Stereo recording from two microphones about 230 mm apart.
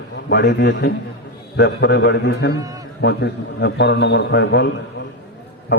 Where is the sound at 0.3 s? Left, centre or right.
Left.